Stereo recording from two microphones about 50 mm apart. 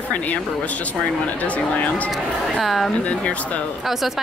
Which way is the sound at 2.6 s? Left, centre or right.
Centre.